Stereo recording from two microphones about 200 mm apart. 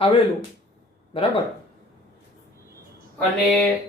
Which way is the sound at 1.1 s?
25° left (ahead or behind).